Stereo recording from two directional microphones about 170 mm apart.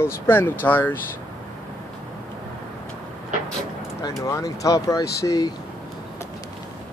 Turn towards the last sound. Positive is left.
turn(degrees=20)  # may be behind; listen again after turning